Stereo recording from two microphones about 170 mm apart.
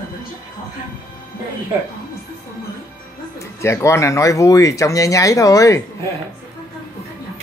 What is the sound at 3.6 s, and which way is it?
Speech, 15° left (ahead or behind).